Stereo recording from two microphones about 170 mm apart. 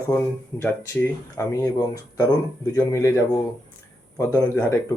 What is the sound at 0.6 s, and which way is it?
Speech, 15° left (ahead or behind).